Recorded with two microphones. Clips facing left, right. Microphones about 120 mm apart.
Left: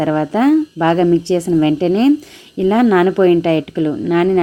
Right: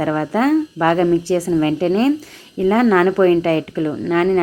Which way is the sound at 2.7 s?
30° right (ahead or behind).